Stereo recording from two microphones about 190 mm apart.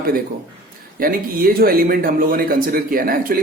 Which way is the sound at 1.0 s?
50° right (ahead or behind).